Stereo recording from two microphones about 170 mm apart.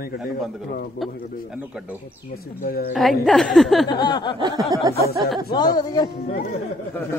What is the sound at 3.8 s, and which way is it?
Speech, 25° left (ahead or behind).